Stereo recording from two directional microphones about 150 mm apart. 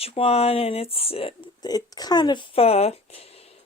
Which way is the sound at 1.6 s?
25° left (ahead or behind).